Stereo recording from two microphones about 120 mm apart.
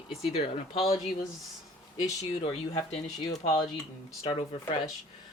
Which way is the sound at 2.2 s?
55° left (ahead or behind).